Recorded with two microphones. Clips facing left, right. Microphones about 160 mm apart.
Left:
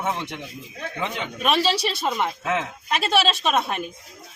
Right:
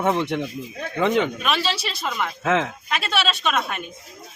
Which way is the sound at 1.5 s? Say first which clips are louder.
Left 3 dB; 35° left (ahead or behind).